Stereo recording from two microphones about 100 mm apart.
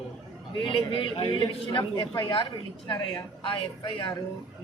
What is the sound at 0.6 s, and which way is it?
A man's voice, 60° left (ahead or behind).